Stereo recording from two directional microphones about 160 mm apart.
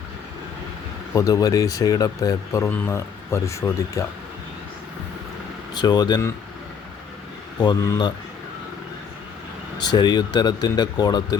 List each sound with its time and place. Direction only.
1.1 s speech: 20° left (ahead or behind)
5.7 s speech: 25° left (ahead or behind)
7.6 s speech: 25° left (ahead or behind)
9.7 s speech: 25° left (ahead or behind)